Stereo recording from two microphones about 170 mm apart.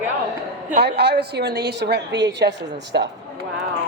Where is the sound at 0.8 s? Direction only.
75° right (ahead or behind).